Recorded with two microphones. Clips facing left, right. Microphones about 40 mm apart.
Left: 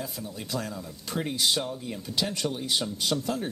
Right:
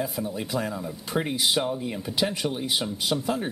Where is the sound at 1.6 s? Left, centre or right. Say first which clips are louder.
Right 5 dB; right.